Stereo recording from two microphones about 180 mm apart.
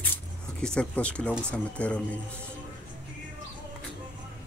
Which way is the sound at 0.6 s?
5° left (ahead or behind).